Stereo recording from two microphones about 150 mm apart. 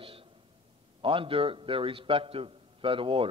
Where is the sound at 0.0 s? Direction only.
35° right (ahead or behind).